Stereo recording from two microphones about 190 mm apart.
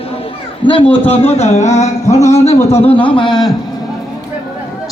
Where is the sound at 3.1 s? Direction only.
25° left (ahead or behind).